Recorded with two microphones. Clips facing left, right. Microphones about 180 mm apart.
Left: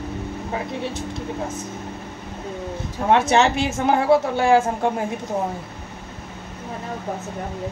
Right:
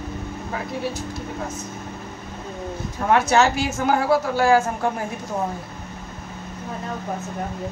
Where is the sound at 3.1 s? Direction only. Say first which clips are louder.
Left 1 dB; 25° left (ahead or behind).